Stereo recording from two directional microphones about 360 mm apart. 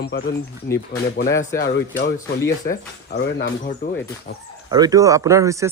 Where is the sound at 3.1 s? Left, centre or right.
Left.